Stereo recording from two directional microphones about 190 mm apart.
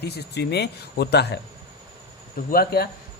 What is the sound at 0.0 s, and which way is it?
Speech, 60° left (ahead or behind).